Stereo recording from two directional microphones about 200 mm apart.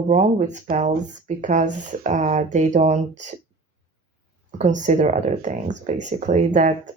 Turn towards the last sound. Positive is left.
turn(degrees=-35)  # may be behind; listen again after turning